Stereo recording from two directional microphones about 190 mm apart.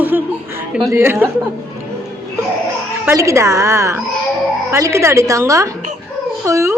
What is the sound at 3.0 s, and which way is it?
A woman's voice, 15° right (ahead or behind).